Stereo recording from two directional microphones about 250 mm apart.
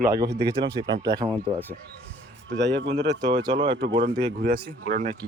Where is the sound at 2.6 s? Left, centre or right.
Right.